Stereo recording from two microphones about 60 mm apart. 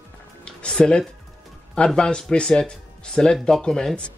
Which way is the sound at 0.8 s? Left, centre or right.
Centre.